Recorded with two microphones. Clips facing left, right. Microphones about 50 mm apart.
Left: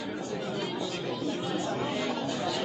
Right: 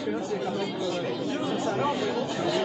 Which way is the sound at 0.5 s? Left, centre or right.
Centre.